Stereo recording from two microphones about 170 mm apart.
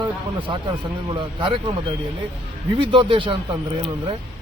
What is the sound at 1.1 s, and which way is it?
Speech, 30° right (ahead or behind).